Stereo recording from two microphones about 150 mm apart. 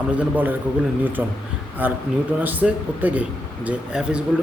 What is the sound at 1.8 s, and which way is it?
A man's voice, 10° right (ahead or behind).